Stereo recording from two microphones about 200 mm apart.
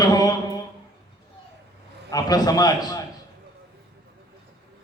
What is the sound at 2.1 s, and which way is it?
Speech, 20° left (ahead or behind).